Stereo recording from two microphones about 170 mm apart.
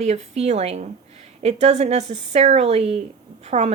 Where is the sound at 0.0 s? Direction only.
40° right (ahead or behind).